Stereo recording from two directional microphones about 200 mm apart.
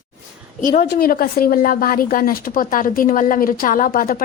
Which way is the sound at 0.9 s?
45° left (ahead or behind).